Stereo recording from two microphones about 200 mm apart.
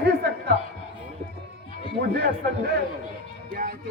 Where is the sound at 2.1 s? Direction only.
55° right (ahead or behind).